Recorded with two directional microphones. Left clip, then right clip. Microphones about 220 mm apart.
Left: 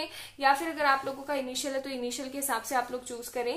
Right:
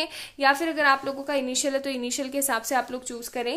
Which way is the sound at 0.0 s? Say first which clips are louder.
Right 5 dB; 50° right (ahead or behind).